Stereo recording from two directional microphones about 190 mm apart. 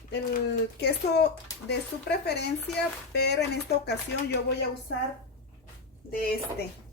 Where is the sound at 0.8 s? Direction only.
60° left (ahead or behind).